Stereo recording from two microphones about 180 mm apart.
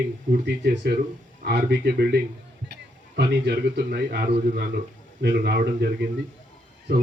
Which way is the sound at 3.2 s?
65° right (ahead or behind).